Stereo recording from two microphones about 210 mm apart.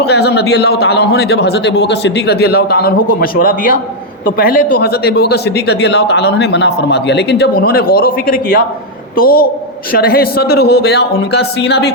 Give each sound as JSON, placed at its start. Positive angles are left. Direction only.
{"t": 0.0, "sound": "speech", "side_deg": 50}